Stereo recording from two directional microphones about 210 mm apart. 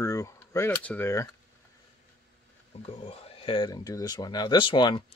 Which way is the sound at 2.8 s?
30° left (ahead or behind).